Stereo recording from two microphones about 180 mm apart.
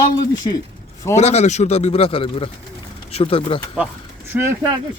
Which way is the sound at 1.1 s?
40° left (ahead or behind).